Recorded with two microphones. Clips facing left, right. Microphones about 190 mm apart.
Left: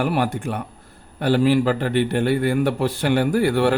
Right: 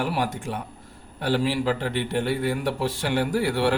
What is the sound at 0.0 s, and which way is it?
A man's voice, 55° left (ahead or behind).